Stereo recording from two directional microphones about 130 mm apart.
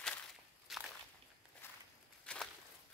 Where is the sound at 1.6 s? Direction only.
20° left (ahead or behind).